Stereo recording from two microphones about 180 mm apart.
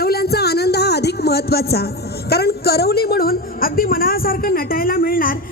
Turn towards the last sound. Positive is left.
turn(degrees=50)  # may be behind; listen again after turning